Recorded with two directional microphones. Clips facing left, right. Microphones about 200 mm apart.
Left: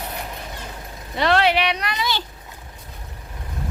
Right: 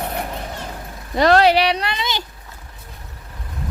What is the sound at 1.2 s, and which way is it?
Speech, 40° right (ahead or behind).